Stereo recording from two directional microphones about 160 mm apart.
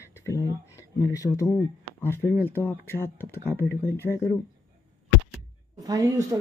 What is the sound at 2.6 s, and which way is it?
Speech, 15° left (ahead or behind).